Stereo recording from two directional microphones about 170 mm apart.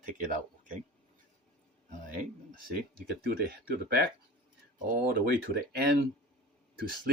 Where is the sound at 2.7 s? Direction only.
65° right (ahead or behind).